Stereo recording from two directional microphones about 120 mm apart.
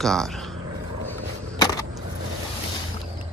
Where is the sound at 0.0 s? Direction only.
5° left (ahead or behind).